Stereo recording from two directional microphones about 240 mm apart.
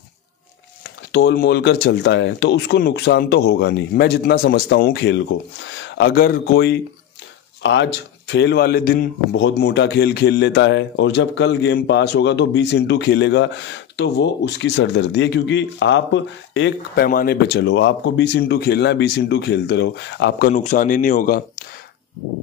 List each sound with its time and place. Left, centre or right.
0.8 s a man's voice: left